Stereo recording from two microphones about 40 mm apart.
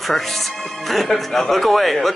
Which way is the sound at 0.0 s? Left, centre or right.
Centre.